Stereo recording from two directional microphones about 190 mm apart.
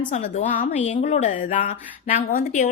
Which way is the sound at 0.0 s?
35° left (ahead or behind).